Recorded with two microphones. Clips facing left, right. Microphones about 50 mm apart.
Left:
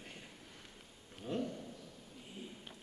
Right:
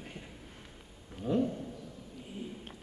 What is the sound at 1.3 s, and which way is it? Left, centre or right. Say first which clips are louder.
Speech: right 9 dB; right.